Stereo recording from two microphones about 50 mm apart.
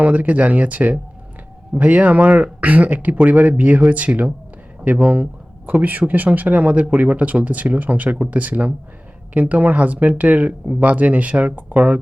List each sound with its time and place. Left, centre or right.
0.0 s speech: right